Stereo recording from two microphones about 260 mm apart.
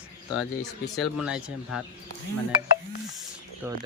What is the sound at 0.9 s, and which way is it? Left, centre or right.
Speech, centre.